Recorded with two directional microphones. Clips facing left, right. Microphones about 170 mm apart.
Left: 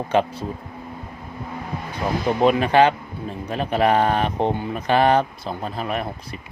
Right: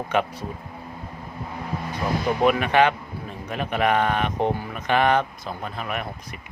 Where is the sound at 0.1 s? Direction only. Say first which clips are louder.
Left 4 dB; 30° left (ahead or behind).